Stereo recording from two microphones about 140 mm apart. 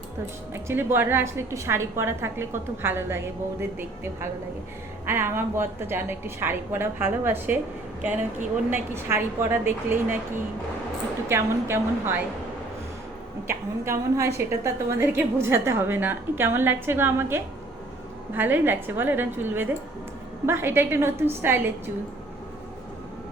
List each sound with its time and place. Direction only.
0.5 s a woman's voice: 15° right (ahead or behind)
8.7 s a woman's voice: 15° right (ahead or behind)
11.3 s a woman's voice: 15° right (ahead or behind)
13.5 s a woman's voice: 20° right (ahead or behind)